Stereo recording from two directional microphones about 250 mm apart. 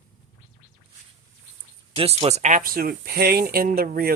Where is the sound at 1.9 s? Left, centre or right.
Right.